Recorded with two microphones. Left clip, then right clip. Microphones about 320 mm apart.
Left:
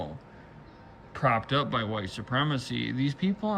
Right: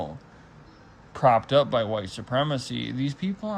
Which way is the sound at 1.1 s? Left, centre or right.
Centre.